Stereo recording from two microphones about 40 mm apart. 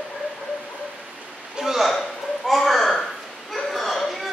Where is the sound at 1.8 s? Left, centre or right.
Centre.